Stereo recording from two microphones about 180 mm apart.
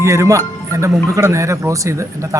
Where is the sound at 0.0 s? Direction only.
15° right (ahead or behind).